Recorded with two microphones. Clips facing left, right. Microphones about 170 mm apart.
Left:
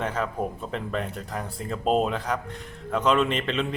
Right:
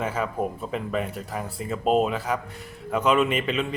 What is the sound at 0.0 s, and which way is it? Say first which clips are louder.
Speech: right 1 dB; 5° right (ahead or behind).